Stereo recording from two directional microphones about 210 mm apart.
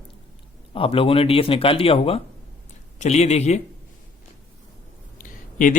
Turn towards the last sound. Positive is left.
turn(degrees=40)  # may be behind; listen again after turning